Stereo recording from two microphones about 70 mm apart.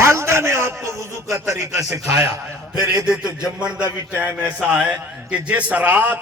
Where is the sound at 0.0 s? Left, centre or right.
Right.